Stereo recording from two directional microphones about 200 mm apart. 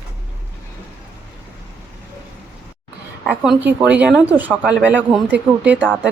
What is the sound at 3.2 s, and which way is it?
A woman's voice, 5° right (ahead or behind).